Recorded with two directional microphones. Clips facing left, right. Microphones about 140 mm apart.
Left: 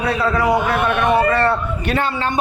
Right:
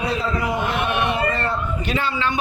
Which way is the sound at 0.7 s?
50° left (ahead or behind).